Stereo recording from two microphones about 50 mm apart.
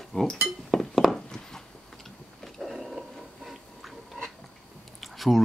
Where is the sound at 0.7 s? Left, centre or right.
Centre.